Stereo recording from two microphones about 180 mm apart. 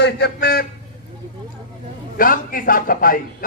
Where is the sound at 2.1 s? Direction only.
50° left (ahead or behind).